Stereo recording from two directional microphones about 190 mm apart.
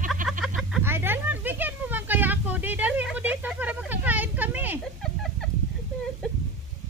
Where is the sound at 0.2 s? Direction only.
45° right (ahead or behind).